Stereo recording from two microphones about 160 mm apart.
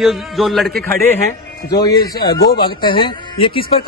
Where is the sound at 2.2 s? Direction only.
70° left (ahead or behind).